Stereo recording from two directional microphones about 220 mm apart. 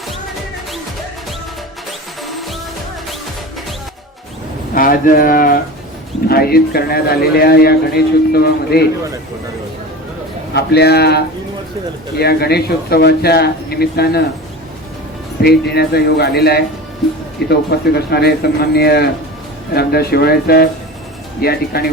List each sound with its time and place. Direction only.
2.2 s music: centre (ahead or behind)
4.7 s a man's voice: 40° left (ahead or behind)
10.5 s a man's voice: 45° left (ahead or behind)
15.4 s a man's voice: 45° left (ahead or behind)